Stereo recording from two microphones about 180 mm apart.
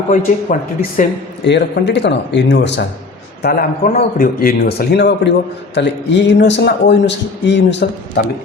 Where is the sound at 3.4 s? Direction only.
55° left (ahead or behind).